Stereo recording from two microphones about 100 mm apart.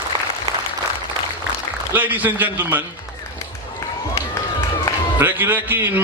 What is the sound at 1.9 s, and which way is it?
Speech, 20° right (ahead or behind).